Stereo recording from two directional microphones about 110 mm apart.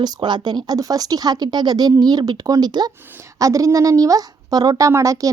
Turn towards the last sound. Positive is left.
turn(degrees=-30)  # may be behind; listen again after turning